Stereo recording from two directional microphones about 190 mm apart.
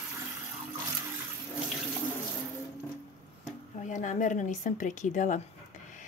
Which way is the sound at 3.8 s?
40° left (ahead or behind).